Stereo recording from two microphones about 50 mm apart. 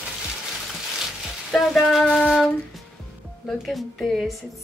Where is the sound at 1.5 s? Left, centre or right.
Centre.